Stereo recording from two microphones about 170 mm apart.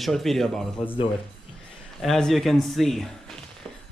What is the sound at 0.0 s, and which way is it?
Speech, centre (ahead or behind).